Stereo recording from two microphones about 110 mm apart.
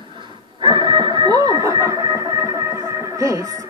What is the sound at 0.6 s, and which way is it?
Music, 45° right (ahead or behind).